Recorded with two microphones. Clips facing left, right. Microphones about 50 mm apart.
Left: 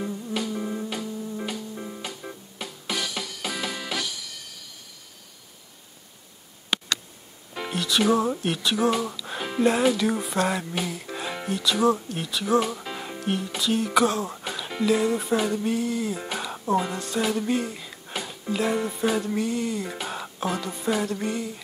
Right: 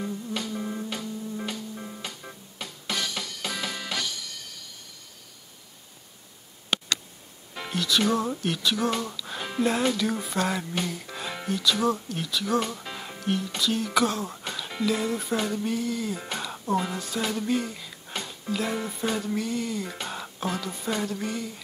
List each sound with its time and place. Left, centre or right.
0.0 s music: centre
7.5 s speech: centre